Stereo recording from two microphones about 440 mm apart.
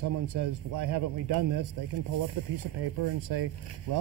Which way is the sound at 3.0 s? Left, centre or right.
Right.